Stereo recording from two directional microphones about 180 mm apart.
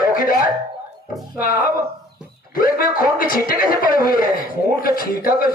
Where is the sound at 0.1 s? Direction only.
55° left (ahead or behind).